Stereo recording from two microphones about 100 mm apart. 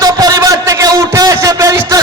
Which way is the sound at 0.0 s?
40° right (ahead or behind).